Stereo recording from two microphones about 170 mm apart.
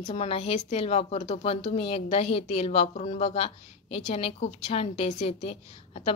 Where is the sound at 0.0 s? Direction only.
35° left (ahead or behind).